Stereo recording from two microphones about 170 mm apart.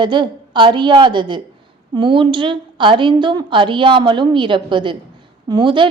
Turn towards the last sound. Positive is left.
turn(degrees=-30)  # may be behind; listen again after turning